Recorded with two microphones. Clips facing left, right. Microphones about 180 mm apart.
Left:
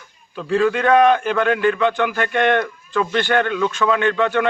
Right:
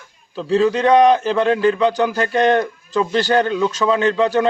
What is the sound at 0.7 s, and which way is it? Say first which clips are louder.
A man's voice: right 2 dB; 35° right (ahead or behind).